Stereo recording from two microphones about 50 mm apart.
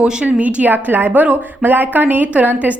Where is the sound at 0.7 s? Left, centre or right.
Right.